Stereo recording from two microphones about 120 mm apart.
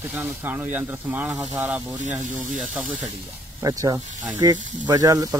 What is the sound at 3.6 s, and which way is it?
Speech, 30° right (ahead or behind).